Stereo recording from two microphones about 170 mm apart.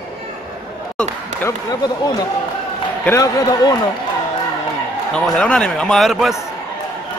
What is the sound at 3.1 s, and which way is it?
Speech, 20° left (ahead or behind).